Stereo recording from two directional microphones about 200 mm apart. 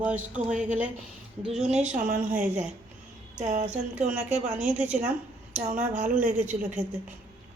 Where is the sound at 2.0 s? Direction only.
45° right (ahead or behind).